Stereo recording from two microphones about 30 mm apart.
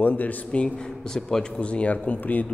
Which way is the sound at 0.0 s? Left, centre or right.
Left.